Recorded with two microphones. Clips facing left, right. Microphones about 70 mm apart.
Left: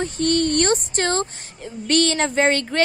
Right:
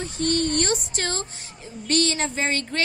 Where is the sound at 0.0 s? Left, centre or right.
Left.